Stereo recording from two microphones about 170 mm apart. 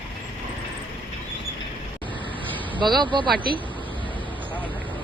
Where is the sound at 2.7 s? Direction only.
25° right (ahead or behind).